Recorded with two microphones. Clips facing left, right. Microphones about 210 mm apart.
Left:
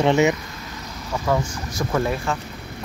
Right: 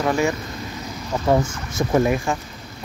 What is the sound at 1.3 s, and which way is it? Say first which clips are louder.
Speech: right 4 dB; 25° right (ahead or behind).